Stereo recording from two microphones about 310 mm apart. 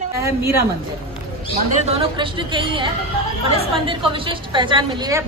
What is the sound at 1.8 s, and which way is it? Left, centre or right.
A woman's voice, centre.